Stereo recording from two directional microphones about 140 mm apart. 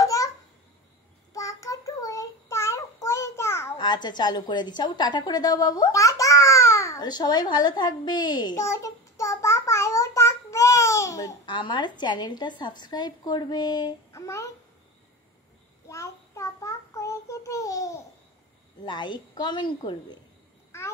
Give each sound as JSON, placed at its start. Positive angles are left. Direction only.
{"t": 0.0, "sound": "babbling", "side_deg": 25}
{"t": 1.3, "sound": "child singing", "side_deg": 25}
{"t": 3.7, "sound": "a woman's voice", "side_deg": 30}
{"t": 8.6, "sound": "child singing", "side_deg": 20}
{"t": 15.9, "sound": "child singing", "side_deg": 20}
{"t": 18.9, "sound": "a woman's voice", "side_deg": 30}
{"t": 20.7, "sound": "babbling", "side_deg": 20}